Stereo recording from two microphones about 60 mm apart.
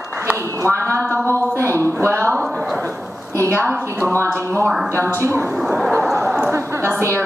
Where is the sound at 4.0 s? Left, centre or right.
Left.